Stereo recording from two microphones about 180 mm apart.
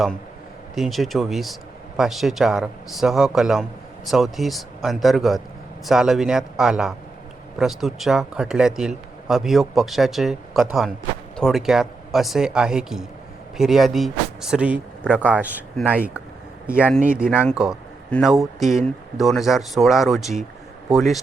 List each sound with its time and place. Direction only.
0.8 s a man's voice: centre (ahead or behind)